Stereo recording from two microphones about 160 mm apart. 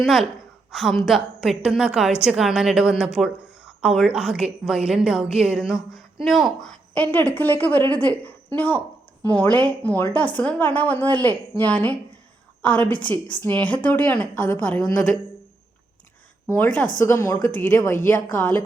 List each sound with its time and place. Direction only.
0.0 s a woman's voice: centre (ahead or behind)
16.5 s a woman's voice: 10° left (ahead or behind)